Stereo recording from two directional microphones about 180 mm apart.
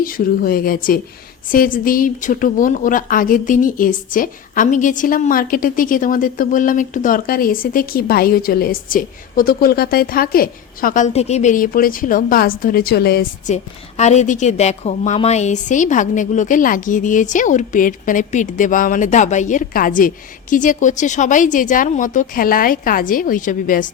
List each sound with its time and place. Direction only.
0.0 s a woman's voice: 55° left (ahead or behind)
13.5 s a woman's voice: 40° left (ahead or behind)